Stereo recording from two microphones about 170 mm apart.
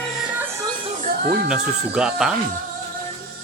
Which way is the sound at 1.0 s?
60° right (ahead or behind).